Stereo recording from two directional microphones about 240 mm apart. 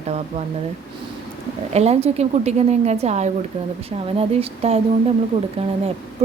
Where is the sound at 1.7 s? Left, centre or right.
Right.